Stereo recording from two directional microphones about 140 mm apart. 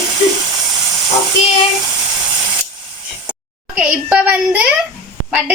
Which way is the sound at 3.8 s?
5° right (ahead or behind).